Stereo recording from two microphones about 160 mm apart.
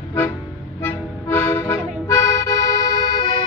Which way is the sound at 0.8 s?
15° left (ahead or behind).